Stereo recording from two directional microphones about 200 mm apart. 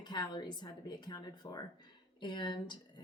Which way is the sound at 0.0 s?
20° left (ahead or behind).